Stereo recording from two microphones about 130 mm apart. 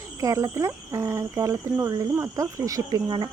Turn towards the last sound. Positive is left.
turn(degrees=-30)  # may be behind; listen again after turning